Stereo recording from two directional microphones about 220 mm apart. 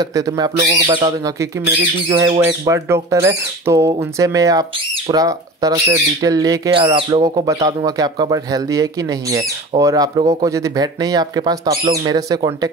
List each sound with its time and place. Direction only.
0.0 s speech: 15° right (ahead or behind)